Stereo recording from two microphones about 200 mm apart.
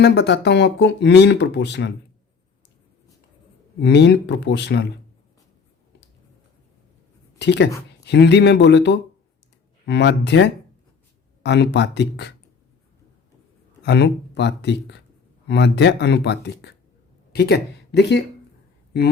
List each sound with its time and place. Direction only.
0.0 s speech: 55° left (ahead or behind)
3.8 s speech: 60° left (ahead or behind)
7.3 s a woman's voice: 60° left (ahead or behind)
13.8 s speech: 60° left (ahead or behind)